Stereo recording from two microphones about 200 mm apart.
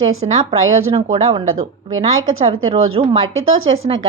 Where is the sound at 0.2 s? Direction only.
25° right (ahead or behind).